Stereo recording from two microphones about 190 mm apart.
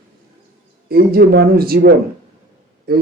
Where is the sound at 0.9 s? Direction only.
55° right (ahead or behind).